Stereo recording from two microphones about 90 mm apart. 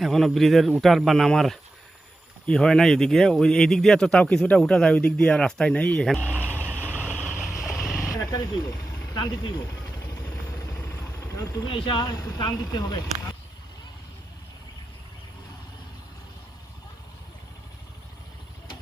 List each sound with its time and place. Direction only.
0.0 s speech: centre (ahead or behind)
6.2 s vehicle: 20° right (ahead or behind)
7.0 s vehicle: 15° left (ahead or behind)
7.6 s vehicle: centre (ahead or behind)
8.1 s vehicle: 45° left (ahead or behind)
9.1 s speech: 55° left (ahead or behind)
10.8 s vehicle: 25° left (ahead or behind)
11.7 s speech: 65° left (ahead or behind)
12.0 s speech: 45° left (ahead or behind)